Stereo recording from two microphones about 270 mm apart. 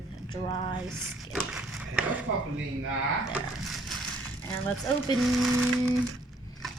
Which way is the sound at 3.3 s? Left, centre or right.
Centre.